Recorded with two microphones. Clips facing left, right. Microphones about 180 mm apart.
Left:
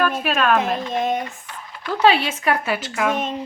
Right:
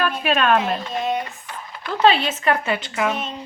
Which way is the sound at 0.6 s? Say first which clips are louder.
Left 2 dB; 50° left (ahead or behind).